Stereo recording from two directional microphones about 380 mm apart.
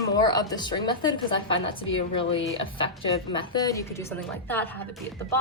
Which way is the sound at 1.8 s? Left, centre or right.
Left.